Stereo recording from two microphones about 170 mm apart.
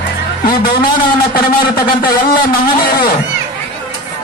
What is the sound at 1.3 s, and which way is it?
Speech, 60° left (ahead or behind).